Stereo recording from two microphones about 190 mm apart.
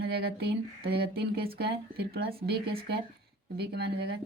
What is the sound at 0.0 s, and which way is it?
Speech, 55° right (ahead or behind).